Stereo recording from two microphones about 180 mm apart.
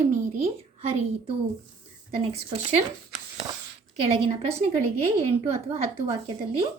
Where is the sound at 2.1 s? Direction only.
35° right (ahead or behind).